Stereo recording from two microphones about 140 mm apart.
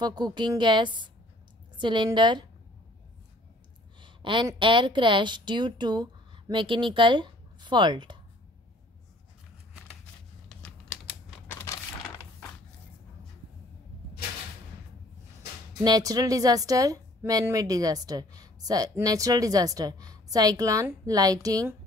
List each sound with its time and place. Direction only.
0.0 s a woman's voice: 30° right (ahead or behind)
4.0 s a sound: 35° right (ahead or behind)
4.6 s a woman's voice: 35° right (ahead or behind)
10.5 s crumpling: 5° left (ahead or behind)
15.8 s a woman's voice: 30° right (ahead or behind)